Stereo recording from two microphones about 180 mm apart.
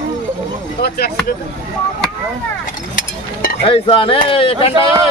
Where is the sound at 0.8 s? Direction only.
60° left (ahead or behind).